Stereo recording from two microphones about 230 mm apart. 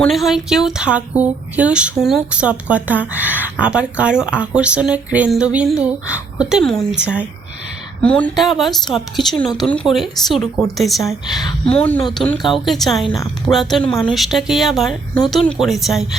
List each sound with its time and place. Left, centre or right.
0.0 s speech: centre
11.3 s a woman's voice: centre
11.7 s speech: centre